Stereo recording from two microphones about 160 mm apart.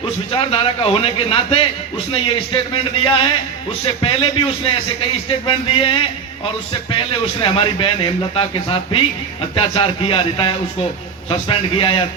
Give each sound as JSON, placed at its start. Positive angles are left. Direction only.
{"t": 0.3, "sound": "speech", "side_deg": 35}
{"t": 7.4, "sound": "speech", "side_deg": 30}